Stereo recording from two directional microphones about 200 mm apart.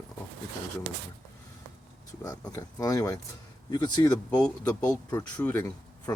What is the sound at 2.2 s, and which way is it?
Speech, 15° left (ahead or behind).